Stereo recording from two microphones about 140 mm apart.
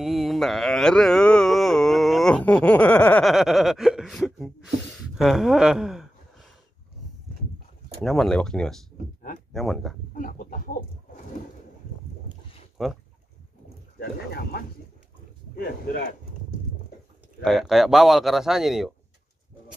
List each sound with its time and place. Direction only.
0.0 s a sound: centre (ahead or behind)
4.9 s speech: centre (ahead or behind)
8.0 s a man's voice: centre (ahead or behind)
10.1 s pig: 90° left
12.8 s a man's voice: 5° right (ahead or behind)
13.9 s pig: 90° left
17.4 s a man's voice: centre (ahead or behind)